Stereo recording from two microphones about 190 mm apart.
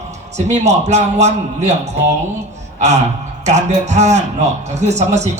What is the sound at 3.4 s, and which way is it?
A man's voice, 35° right (ahead or behind).